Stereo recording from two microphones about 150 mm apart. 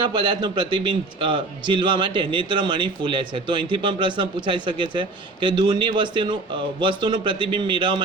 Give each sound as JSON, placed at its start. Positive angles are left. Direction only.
{"t": 0.0, "sound": "a man's voice", "side_deg": -30}